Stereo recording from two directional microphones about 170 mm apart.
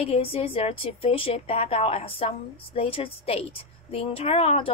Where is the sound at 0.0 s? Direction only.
35° left (ahead or behind).